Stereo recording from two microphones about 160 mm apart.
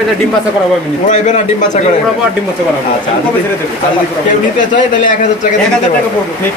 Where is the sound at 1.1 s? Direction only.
50° left (ahead or behind).